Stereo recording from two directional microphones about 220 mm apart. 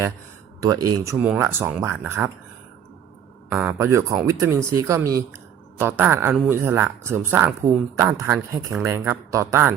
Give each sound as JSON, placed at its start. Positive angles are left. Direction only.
{"t": 0.6, "sound": "speech", "side_deg": -15}
{"t": 3.5, "sound": "speech", "side_deg": -10}